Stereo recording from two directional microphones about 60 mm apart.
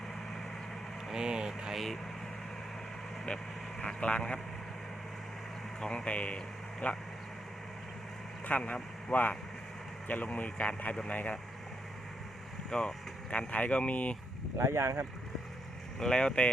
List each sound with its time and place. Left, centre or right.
1.1 s speech: centre
3.2 s speech: centre
5.8 s speech: left
8.4 s speech: left
12.7 s speech: centre
13.3 s speech: left
14.6 s speech: right
16.0 s speech: centre